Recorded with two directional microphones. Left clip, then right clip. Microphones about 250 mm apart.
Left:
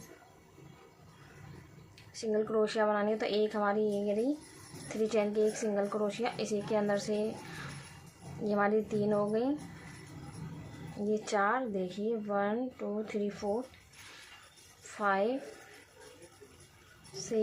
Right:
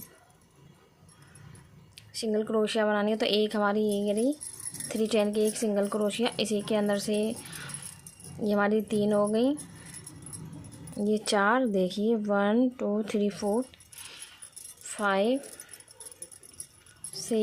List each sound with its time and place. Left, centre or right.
2.1 s speech: right
8.4 s speech: right
11.0 s speech: right
14.9 s speech: right
17.2 s a sound: right